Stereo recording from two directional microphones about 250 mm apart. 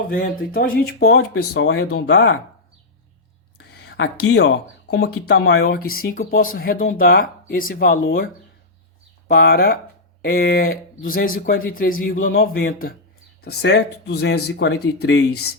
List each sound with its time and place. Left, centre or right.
0.1 s speech: left
3.6 s a sound: left
5.2 s speech: left